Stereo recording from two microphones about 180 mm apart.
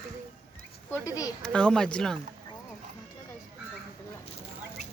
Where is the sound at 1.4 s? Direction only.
5° left (ahead or behind).